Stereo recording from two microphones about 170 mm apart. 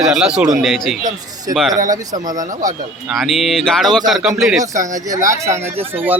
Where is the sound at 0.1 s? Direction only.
5° right (ahead or behind).